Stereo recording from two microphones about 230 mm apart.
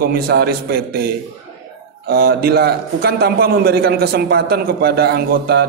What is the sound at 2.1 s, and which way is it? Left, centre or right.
A man's voice, right.